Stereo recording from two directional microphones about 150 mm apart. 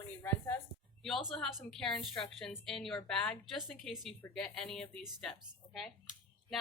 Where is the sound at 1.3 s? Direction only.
Centre (ahead or behind).